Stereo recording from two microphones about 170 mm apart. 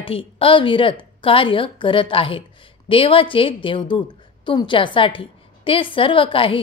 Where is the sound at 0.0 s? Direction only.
30° left (ahead or behind).